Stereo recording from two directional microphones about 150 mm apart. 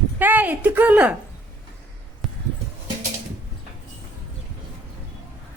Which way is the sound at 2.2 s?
Centre (ahead or behind).